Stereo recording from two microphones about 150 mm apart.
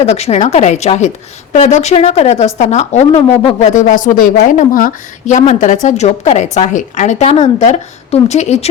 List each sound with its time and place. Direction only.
0.0 s a woman's voice: 45° left (ahead or behind)
3.6 s a woman's voice: 55° left (ahead or behind)